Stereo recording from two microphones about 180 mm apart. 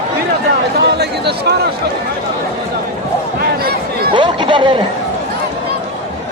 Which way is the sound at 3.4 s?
60° right (ahead or behind).